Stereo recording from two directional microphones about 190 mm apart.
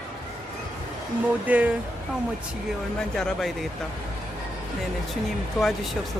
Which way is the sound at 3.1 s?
Centre (ahead or behind).